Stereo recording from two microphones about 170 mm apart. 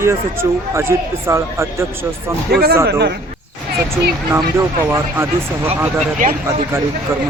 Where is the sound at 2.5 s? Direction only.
65° right (ahead or behind).